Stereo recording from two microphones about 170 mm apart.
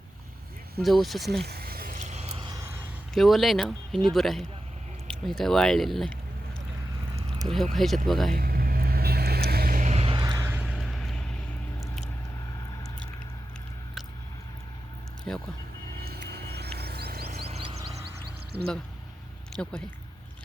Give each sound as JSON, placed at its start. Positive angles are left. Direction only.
{"t": 0.8, "sound": "speech", "side_deg": 0}
{"t": 1.5, "sound": "a sound", "side_deg": -65}
{"t": 2.4, "sound": "vehicle", "side_deg": -25}
{"t": 2.7, "sound": "speech", "side_deg": 0}
{"t": 7.5, "sound": "speech", "side_deg": 0}
{"t": 8.4, "sound": "vehicle", "side_deg": -60}
{"t": 9.9, "sound": "a sound", "side_deg": -35}
{"t": 10.2, "sound": "vehicle", "side_deg": -25}
{"t": 10.4, "sound": "a sound", "side_deg": -5}
{"t": 15.3, "sound": "speech", "side_deg": 5}
{"t": 16.0, "sound": "vehicle", "side_deg": -65}
{"t": 17.4, "sound": "music", "side_deg": -35}